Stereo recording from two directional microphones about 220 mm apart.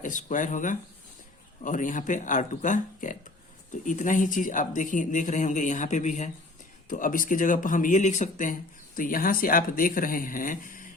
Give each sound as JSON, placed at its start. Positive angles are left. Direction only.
{"t": 0.0, "sound": "speech", "side_deg": 35}